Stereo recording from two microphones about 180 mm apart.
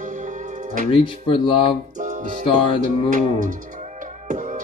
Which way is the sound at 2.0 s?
45° right (ahead or behind).